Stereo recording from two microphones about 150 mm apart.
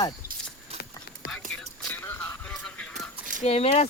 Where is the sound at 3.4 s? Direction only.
45° left (ahead or behind).